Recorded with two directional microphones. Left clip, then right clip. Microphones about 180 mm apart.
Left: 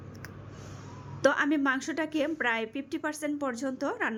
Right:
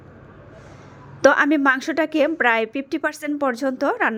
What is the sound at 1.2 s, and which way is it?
A woman's voice, 15° right (ahead or behind).